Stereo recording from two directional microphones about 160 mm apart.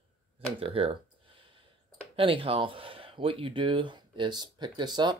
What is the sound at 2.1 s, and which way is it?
Speech, 35° right (ahead or behind).